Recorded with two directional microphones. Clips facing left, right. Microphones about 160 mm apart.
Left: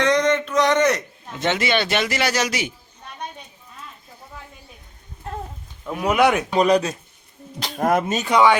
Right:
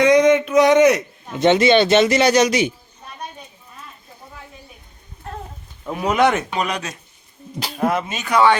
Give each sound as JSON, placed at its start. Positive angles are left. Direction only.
{"t": 0.0, "sound": "a sound", "side_deg": -10}
{"t": 1.3, "sound": "a man's voice", "side_deg": -20}
{"t": 5.9, "sound": "speech", "side_deg": 0}
{"t": 6.5, "sound": "speech", "side_deg": 35}
{"t": 7.8, "sound": "speech", "side_deg": 45}